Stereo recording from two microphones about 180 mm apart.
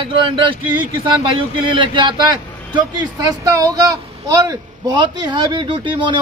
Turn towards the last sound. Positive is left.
turn(degrees=-25)  # may be behind; listen again after turning